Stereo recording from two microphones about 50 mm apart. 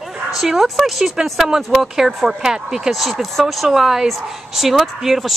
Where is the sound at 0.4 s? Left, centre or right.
Centre.